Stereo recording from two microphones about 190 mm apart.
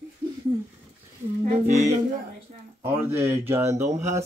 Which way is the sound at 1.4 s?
40° right (ahead or behind).